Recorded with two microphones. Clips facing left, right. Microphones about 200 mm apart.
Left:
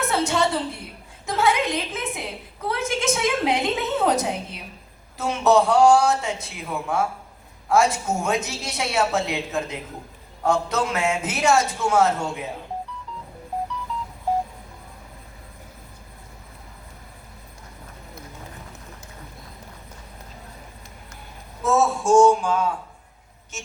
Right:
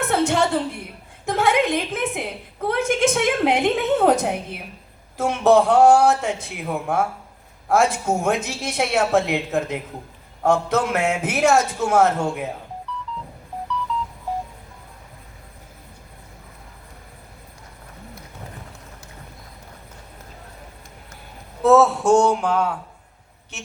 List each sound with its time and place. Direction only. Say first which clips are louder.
0.1 s a sound: right 4 dB; 55° right (ahead or behind)
1.2 s a woman's voice: right 3 dB; 55° right (ahead or behind)
21.6 s a woman's voice: right 6 dB; 65° right (ahead or behind)